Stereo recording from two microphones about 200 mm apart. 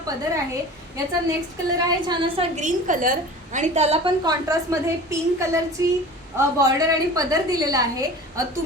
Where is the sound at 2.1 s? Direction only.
25° right (ahead or behind).